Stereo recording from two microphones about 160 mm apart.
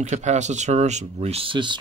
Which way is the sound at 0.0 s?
45° right (ahead or behind).